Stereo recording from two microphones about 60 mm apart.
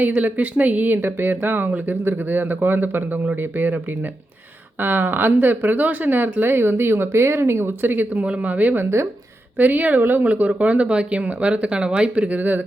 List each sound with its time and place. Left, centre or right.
0.2 s speech: right
4.8 s speech: right
8.2 s speech: right